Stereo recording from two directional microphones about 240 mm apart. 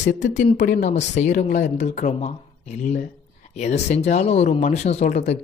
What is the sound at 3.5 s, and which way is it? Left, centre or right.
Speech, left.